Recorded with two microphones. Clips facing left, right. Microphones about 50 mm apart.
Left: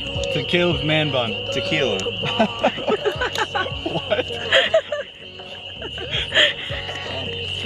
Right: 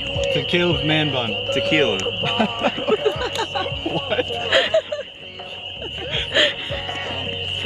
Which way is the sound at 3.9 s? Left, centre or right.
Right.